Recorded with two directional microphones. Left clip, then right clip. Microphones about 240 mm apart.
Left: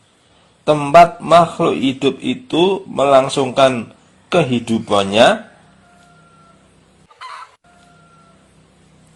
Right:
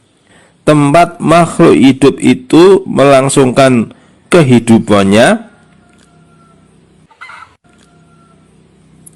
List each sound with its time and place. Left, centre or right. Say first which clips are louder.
0.7 s a man's voice: right 2 dB; right